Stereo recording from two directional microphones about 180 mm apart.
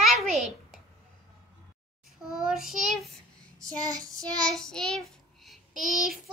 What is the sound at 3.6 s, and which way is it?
Child singing, 20° right (ahead or behind).